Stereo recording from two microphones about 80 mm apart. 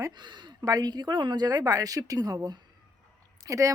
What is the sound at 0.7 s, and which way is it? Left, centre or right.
A woman's voice, right.